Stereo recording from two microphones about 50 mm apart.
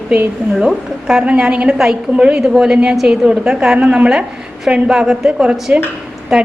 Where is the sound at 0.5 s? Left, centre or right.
Centre.